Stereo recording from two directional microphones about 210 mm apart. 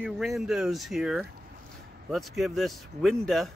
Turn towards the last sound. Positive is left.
turn(degrees=0)  # may be behind; listen again after turning